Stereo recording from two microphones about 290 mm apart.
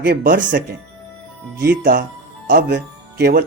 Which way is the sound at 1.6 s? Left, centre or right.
Right.